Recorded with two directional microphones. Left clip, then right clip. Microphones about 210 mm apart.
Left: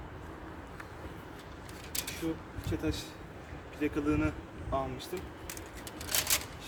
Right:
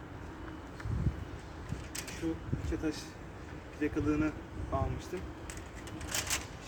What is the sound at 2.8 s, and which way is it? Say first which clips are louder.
Speech: left 1 dB; 25° left (ahead or behind).